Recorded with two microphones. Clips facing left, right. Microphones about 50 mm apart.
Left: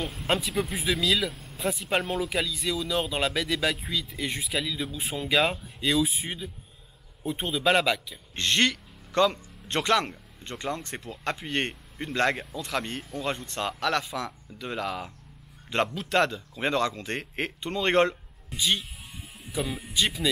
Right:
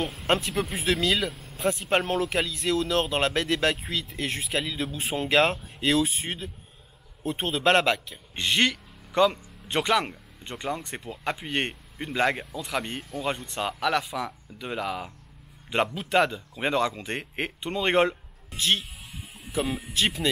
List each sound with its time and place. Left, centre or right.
0.0 s speech: centre